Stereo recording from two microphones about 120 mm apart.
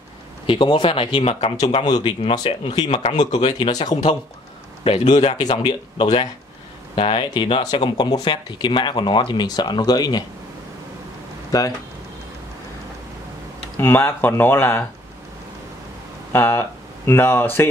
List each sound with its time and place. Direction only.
0.5 s speech: 45° left (ahead or behind)
1.9 s speech: 35° left (ahead or behind)
4.8 s speech: 65° left (ahead or behind)
5.4 s speech: 40° left (ahead or behind)
11.5 s speech: 30° left (ahead or behind)
13.7 s speech: 20° left (ahead or behind)
16.3 s speech: 20° left (ahead or behind)